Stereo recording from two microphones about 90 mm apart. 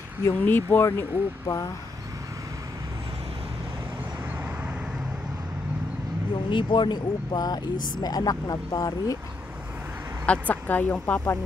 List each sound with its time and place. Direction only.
0.2 s speech: 25° left (ahead or behind)
6.3 s speech: 65° left (ahead or behind); by 9.2 s 40° left (ahead or behind)
10.2 s speech: 15° left (ahead or behind)